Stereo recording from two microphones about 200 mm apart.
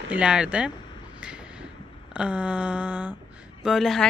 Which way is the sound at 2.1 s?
5° right (ahead or behind).